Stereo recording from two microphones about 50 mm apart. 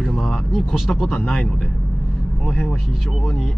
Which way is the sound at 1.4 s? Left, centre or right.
Centre.